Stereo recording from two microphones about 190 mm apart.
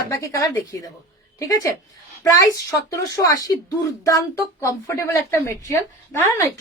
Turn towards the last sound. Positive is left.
turn(degrees=15)  # may be behind; listen again after turning